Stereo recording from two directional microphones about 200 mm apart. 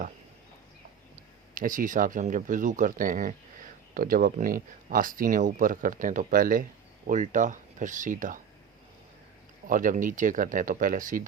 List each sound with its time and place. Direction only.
1.5 s speech: 40° right (ahead or behind)
9.6 s speech: 40° right (ahead or behind)